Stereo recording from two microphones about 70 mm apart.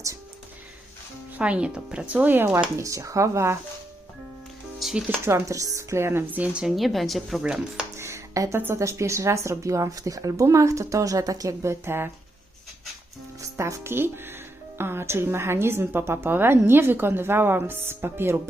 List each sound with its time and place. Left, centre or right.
1.4 s speech: centre
2.2 s speech: right
2.7 s speech: right
4.8 s speech: centre
5.2 s speech: right
6.3 s speech: right
6.6 s a woman's voice: centre
7.4 s speech: centre
7.9 s music: right
8.5 s speech: right
13.6 s speech: right
13.9 s speech: right